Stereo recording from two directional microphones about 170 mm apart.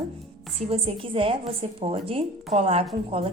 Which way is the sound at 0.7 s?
30° right (ahead or behind).